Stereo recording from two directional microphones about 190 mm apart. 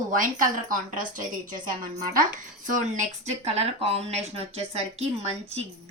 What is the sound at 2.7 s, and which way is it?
A woman's voice, 40° right (ahead or behind).